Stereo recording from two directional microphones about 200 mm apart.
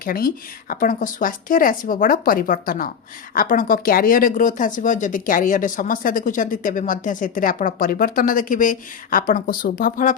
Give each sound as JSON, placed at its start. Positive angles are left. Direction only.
{"t": 0.0, "sound": "speech", "side_deg": 45}